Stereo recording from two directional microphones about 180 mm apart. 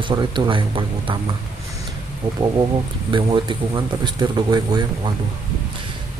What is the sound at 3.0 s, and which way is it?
Speech, 25° right (ahead or behind).